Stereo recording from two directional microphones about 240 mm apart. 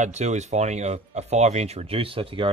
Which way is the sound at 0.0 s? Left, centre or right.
Right.